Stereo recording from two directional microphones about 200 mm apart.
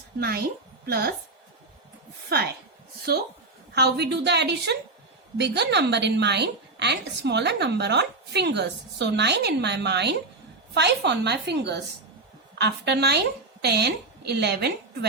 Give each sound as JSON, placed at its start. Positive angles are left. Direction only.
{"t": 0.2, "sound": "a woman's voice", "side_deg": -50}
{"t": 2.3, "sound": "a woman's voice", "side_deg": -50}